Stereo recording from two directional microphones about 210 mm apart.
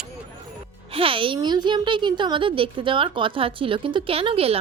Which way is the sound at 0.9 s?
25° right (ahead or behind).